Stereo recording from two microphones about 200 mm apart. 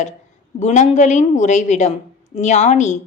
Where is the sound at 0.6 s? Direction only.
35° left (ahead or behind).